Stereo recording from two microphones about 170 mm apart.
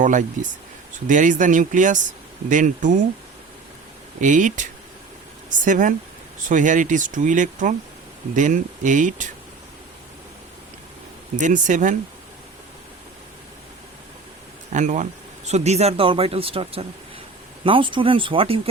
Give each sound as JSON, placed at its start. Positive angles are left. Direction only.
{"t": 0.0, "sound": "speech", "side_deg": -50}
{"t": 4.2, "sound": "speech", "side_deg": -50}
{"t": 11.3, "sound": "speech", "side_deg": -50}
{"t": 14.7, "sound": "speech", "side_deg": -45}